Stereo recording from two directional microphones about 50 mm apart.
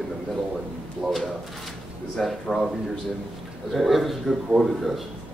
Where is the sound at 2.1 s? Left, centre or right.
Centre.